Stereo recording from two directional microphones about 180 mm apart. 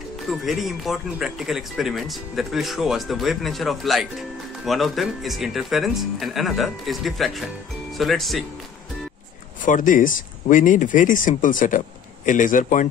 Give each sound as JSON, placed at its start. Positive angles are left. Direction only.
{"t": 0.3, "sound": "speech", "side_deg": 0}
{"t": 9.7, "sound": "speech", "side_deg": 45}